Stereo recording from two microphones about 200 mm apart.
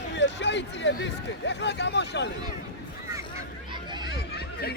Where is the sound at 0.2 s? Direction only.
60° left (ahead or behind).